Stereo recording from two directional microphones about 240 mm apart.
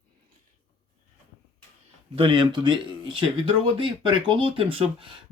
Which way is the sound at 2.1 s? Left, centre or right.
Right.